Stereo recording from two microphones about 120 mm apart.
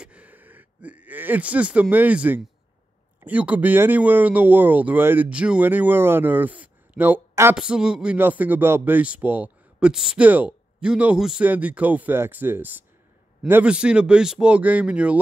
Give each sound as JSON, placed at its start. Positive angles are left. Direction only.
{"t": 0.0, "sound": "a man's voice", "side_deg": -10}
{"t": 7.5, "sound": "a man's voice", "side_deg": -5}